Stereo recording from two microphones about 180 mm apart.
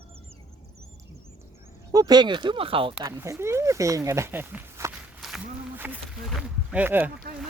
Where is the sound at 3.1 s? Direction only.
15° right (ahead or behind).